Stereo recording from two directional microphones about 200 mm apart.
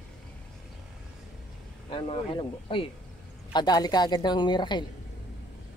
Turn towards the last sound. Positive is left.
turn(degrees=20)  # may be behind; listen again after turning